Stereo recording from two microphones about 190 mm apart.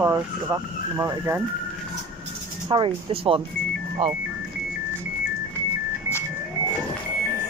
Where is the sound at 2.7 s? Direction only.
25° right (ahead or behind).